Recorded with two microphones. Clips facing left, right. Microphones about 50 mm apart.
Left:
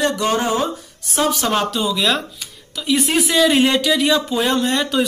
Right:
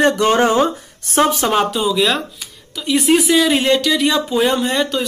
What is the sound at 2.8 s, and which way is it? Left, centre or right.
Speech, centre.